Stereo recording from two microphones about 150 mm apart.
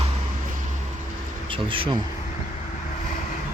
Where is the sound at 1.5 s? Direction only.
35° right (ahead or behind).